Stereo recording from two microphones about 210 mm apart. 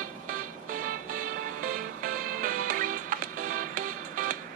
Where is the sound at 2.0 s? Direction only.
40° right (ahead or behind).